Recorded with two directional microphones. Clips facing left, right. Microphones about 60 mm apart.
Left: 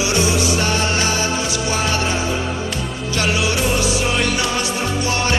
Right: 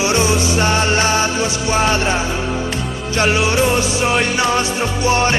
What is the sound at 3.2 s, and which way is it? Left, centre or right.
Music, right.